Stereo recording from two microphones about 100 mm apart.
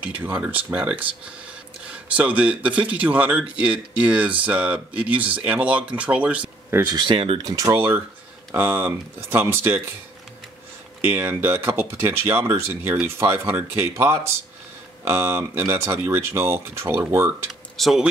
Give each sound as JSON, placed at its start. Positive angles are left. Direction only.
{"t": 0.2, "sound": "speech", "side_deg": -20}
{"t": 2.1, "sound": "speech", "side_deg": -15}
{"t": 6.7, "sound": "speech", "side_deg": -30}
{"t": 7.0, "sound": "speech", "side_deg": -60}
{"t": 7.3, "sound": "speech", "side_deg": -40}
{"t": 7.7, "sound": "speech", "side_deg": -25}
{"t": 11.0, "sound": "speech", "side_deg": -25}
{"t": 17.5, "sound": "speech", "side_deg": 0}